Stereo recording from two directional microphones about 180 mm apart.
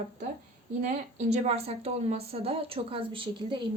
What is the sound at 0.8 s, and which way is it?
A woman's voice, 35° right (ahead or behind).